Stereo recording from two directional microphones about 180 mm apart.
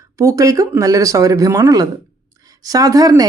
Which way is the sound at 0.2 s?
15° right (ahead or behind).